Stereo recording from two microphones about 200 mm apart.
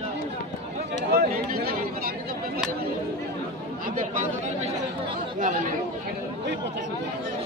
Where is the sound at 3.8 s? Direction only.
40° right (ahead or behind).